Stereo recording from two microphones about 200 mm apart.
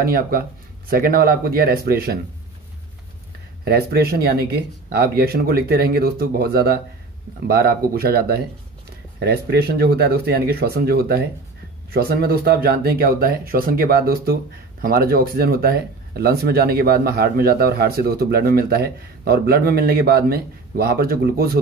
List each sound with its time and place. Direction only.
0.0 s speech: 50° right (ahead or behind)
3.6 s speech: 50° right (ahead or behind)